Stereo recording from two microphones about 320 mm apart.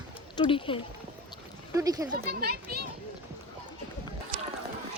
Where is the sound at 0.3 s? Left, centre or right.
Centre.